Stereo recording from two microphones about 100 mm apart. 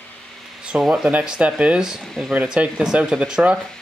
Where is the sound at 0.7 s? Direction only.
5° right (ahead or behind).